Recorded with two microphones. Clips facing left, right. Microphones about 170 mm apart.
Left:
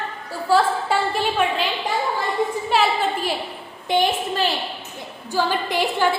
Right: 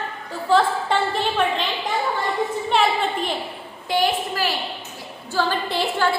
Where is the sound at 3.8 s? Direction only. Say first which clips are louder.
Left 1 dB; 25° left (ahead or behind).